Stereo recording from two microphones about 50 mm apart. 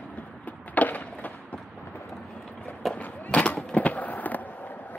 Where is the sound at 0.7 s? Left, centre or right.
Left.